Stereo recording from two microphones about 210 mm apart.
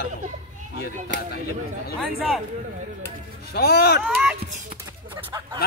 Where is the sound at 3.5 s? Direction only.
50° left (ahead or behind).